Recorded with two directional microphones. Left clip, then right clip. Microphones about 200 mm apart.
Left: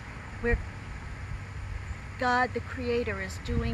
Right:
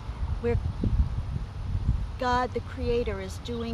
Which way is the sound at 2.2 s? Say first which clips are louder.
Even; 25° right (ahead or behind).